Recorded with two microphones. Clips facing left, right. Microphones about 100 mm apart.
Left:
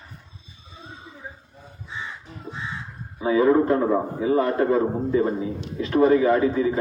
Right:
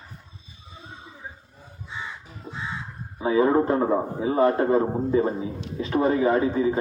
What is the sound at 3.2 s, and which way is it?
A man's voice, 25° right (ahead or behind).